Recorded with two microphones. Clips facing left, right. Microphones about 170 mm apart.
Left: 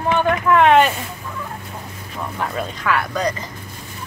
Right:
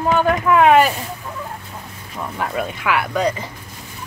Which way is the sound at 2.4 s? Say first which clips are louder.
Right 2 dB; 5° right (ahead or behind).